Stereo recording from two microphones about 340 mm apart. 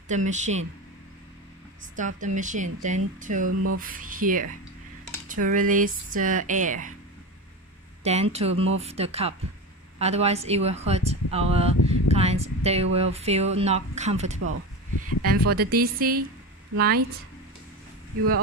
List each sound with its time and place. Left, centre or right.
0.1 s speech: right
2.0 s speech: right
8.0 s speech: centre